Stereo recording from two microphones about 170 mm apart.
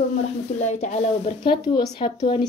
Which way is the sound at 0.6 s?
40° left (ahead or behind).